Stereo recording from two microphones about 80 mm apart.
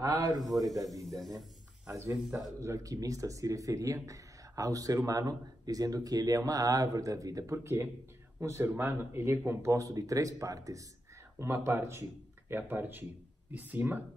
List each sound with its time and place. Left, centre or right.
0.0 s speech: right
1.0 s a man's voice: centre
1.9 s speech: right
11.3 s speech: right